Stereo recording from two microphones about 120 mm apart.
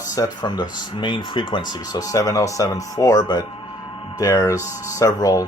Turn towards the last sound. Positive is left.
turn(degrees=30)  # may be behind; listen again after turning